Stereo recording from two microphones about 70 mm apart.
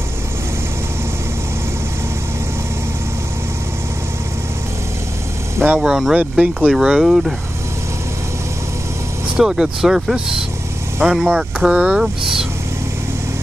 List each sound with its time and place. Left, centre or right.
5.8 s speech: centre
6.3 s speech: centre
9.4 s speech: centre